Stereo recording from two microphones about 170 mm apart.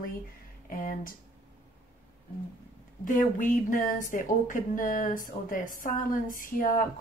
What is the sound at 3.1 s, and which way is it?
A woman's voice, 50° left (ahead or behind).